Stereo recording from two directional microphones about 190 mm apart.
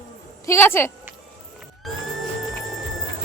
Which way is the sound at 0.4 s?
15° left (ahead or behind).